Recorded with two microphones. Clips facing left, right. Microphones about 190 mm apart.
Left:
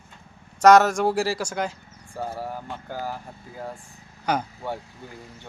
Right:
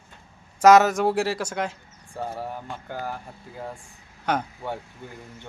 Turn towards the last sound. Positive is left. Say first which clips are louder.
# left 1 dB
turn(degrees=5)  # may be behind; listen again after turning